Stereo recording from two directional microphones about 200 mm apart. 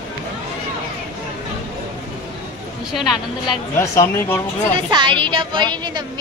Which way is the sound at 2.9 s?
Centre (ahead or behind).